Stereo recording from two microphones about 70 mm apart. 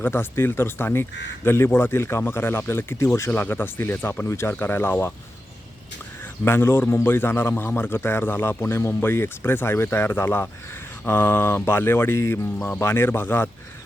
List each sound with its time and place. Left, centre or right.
0.0 s a man's voice: left
4.3 s a man's voice: left
6.4 s a man's voice: left